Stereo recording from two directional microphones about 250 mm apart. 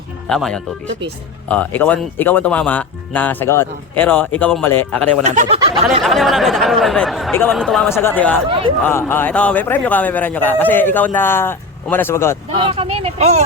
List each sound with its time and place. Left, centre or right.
0.3 s speech: centre
5.2 s speech: right
6.0 s speech: centre
8.4 s speech: right
8.8 s speech: centre
12.5 s speech: centre